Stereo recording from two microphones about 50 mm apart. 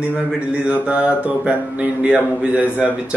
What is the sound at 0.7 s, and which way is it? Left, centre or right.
A man's voice, right.